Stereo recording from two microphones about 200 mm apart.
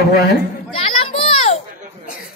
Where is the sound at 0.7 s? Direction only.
30° left (ahead or behind).